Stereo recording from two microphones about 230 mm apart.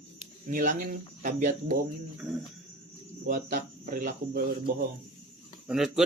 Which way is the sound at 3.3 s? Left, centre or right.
Right.